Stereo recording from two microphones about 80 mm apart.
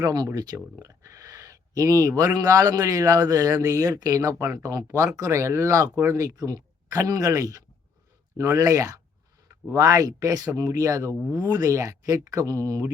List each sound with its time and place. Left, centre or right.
0.0 s speech: right
4.8 s speech: right